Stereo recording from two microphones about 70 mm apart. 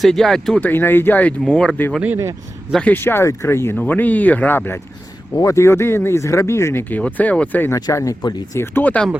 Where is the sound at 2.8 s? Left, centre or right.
Left.